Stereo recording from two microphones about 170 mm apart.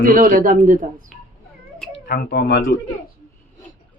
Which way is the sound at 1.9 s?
70° left (ahead or behind).